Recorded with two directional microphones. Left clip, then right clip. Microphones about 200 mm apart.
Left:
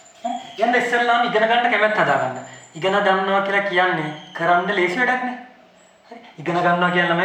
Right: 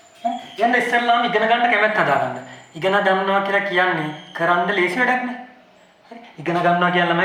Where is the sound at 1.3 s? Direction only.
15° right (ahead or behind).